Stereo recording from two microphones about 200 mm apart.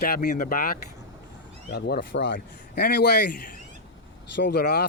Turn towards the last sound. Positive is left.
turn(degrees=55)  # may be behind; listen again after turning